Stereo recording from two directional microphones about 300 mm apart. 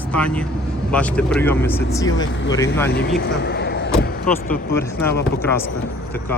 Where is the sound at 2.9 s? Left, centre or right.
Left.